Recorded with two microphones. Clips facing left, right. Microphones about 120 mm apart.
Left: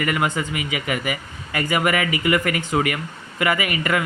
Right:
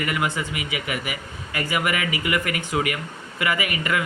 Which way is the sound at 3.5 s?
25° right (ahead or behind).